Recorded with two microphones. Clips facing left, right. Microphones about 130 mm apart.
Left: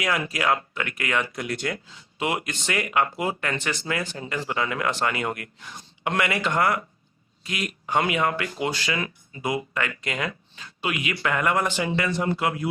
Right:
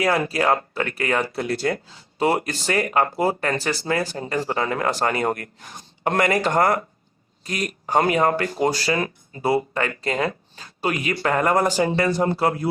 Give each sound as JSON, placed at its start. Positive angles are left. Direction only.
{"t": 0.0, "sound": "speech", "side_deg": -35}